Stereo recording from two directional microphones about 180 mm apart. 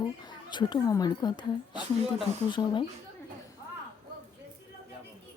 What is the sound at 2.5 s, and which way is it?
Speech, 25° left (ahead or behind).